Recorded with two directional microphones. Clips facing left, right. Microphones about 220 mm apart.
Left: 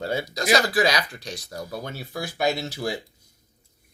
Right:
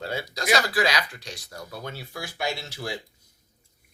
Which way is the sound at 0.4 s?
20° left (ahead or behind).